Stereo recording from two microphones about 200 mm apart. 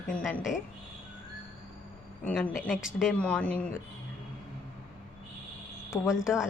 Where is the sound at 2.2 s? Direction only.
5° left (ahead or behind).